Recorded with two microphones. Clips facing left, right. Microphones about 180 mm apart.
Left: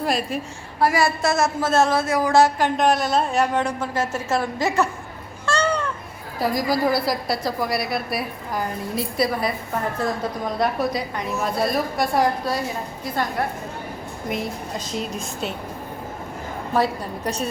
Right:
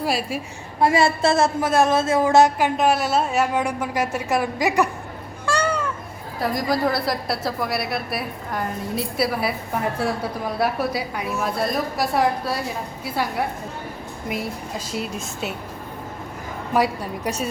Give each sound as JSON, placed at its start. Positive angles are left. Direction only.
{"t": 0.0, "sound": "a woman's voice", "side_deg": -5}
{"t": 0.8, "sound": "speech", "side_deg": -25}
{"t": 1.6, "sound": "speech", "side_deg": -15}
{"t": 2.6, "sound": "a woman's voice", "side_deg": -5}
{"t": 5.5, "sound": "a sound", "side_deg": -10}
{"t": 6.4, "sound": "a woman's voice", "side_deg": 0}
{"t": 16.7, "sound": "a woman's voice", "side_deg": -10}